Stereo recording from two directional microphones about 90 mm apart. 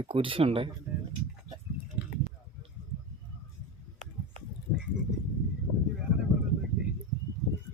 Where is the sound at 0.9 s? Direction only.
20° right (ahead or behind).